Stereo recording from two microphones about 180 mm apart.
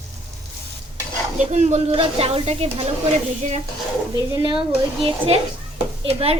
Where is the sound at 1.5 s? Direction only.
40° right (ahead or behind).